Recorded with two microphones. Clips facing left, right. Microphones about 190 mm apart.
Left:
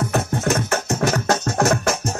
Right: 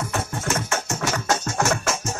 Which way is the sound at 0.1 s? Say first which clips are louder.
Left 6 dB; 60° left (ahead or behind).